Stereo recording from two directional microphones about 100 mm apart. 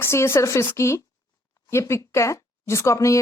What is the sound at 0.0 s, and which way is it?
Speech, 25° left (ahead or behind).